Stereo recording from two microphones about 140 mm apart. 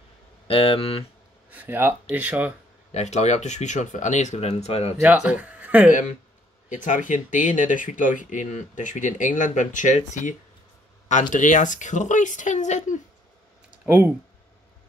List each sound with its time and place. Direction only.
0.5 s speech: 45° left (ahead or behind)
1.5 s speech: 15° right (ahead or behind)
2.9 s speech: 55° left (ahead or behind)
5.0 s speech: 10° right (ahead or behind)
5.9 s speech: 60° left (ahead or behind)
13.8 s speech: 15° right (ahead or behind)